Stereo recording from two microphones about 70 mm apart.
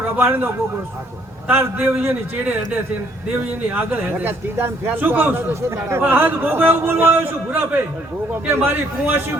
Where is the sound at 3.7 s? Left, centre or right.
Right.